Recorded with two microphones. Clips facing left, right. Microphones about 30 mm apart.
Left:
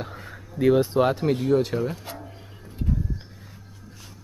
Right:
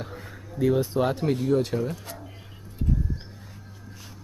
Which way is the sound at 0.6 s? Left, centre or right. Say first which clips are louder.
Left 4 dB; left.